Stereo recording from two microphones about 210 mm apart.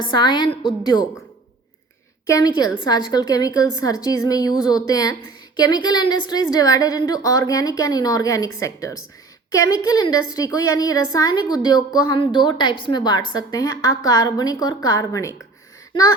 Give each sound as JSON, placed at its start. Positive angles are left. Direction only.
{"t": 0.0, "sound": "a woman's voice", "side_deg": 20}
{"t": 2.2, "sound": "a woman's voice", "side_deg": 15}